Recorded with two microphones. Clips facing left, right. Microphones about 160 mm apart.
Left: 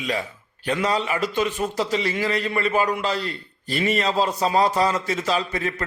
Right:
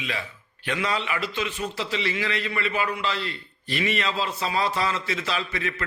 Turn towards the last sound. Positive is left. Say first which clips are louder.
# left 5 dB
turn(degrees=40)  # may be behind; listen again after turning